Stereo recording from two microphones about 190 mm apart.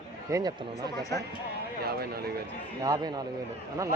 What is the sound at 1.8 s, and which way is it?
Speech, 55° right (ahead or behind).